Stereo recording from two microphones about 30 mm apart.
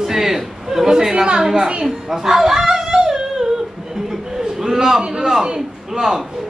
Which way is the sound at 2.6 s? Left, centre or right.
Right.